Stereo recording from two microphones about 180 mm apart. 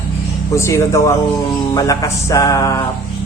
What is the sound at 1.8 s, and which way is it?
Mantra, 20° left (ahead or behind).